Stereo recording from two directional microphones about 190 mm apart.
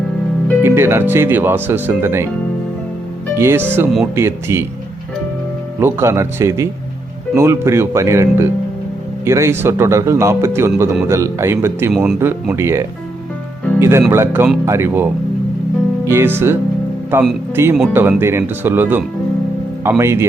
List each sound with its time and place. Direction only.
0.6 s speech: 10° right (ahead or behind)
3.3 s speech: 15° right (ahead or behind)
5.8 s speech: 15° right (ahead or behind)